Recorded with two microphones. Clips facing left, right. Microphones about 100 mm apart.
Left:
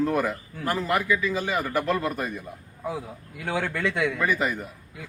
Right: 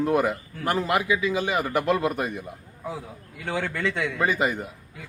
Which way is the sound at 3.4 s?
15° left (ahead or behind).